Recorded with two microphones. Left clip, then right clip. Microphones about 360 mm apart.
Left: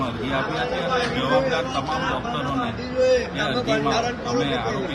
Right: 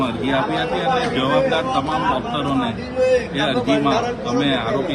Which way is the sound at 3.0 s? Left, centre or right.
Right.